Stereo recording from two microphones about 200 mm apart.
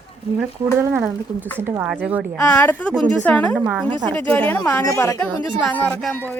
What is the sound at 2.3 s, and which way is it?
A woman's voice, 10° left (ahead or behind).